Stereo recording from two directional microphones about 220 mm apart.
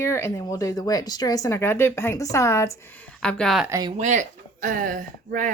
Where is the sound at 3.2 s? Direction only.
5° left (ahead or behind).